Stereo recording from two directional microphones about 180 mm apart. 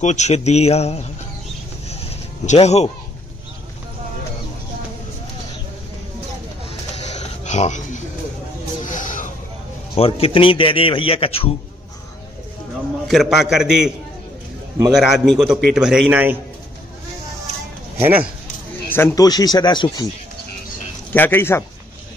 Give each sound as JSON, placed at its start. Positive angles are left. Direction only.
{"t": 0.0, "sound": "a man's voice", "side_deg": 40}
{"t": 1.9, "sound": "a sound", "side_deg": 35}
{"t": 7.0, "sound": "a sound", "side_deg": 40}
{"t": 9.9, "sound": "a man's voice", "side_deg": 35}
{"t": 13.1, "sound": "a man's voice", "side_deg": 0}
{"t": 17.9, "sound": "speech", "side_deg": -10}
{"t": 18.9, "sound": "speech", "side_deg": 10}
{"t": 21.1, "sound": "a man's voice", "side_deg": 10}